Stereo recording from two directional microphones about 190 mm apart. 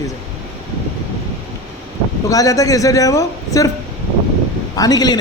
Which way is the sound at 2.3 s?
15° left (ahead or behind).